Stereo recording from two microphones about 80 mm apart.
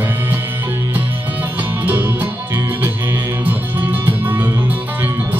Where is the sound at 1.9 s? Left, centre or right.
Right.